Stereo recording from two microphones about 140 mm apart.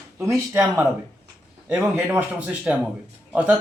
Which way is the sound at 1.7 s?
10° right (ahead or behind).